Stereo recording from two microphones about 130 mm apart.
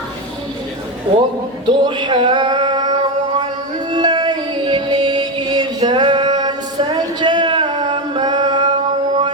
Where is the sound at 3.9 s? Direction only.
35° right (ahead or behind).